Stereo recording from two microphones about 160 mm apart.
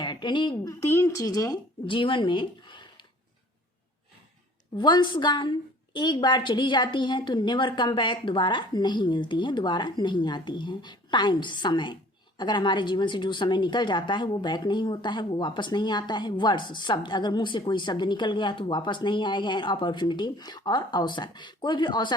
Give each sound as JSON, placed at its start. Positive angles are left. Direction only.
{"t": 0.0, "sound": "speech", "side_deg": 30}
{"t": 4.8, "sound": "a woman's voice", "side_deg": 30}